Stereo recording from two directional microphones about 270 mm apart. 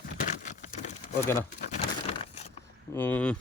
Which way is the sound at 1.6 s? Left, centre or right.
Left.